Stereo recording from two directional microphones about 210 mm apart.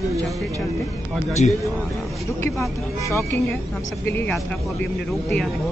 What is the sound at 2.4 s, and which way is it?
Speech, 15° left (ahead or behind).